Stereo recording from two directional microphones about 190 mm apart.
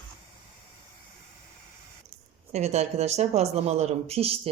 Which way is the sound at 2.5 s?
35° right (ahead or behind).